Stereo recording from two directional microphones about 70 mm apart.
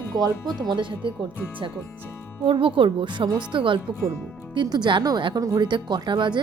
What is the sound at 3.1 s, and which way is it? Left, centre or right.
Speech, right.